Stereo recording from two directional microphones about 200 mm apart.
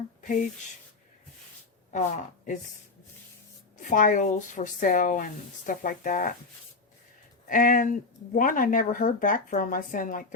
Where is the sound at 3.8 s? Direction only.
40° left (ahead or behind).